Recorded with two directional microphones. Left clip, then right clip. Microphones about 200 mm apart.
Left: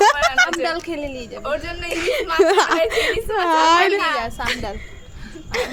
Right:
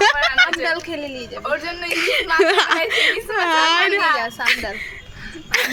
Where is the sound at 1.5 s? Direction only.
20° left (ahead or behind).